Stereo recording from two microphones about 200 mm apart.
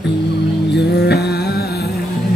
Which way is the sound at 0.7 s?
55° left (ahead or behind).